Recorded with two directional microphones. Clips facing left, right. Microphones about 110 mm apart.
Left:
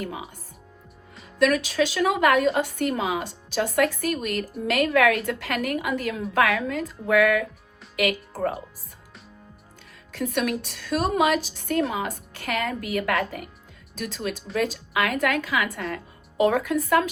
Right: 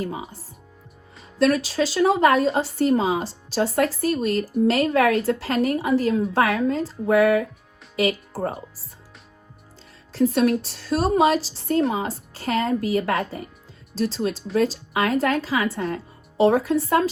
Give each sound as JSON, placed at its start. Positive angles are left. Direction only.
{"t": 0.0, "sound": "a woman's voice", "side_deg": -35}
{"t": 1.4, "sound": "a woman's voice", "side_deg": -35}
{"t": 10.1, "sound": "a woman's voice", "side_deg": -35}